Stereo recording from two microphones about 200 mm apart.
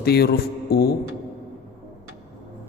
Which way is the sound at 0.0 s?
50° left (ahead or behind).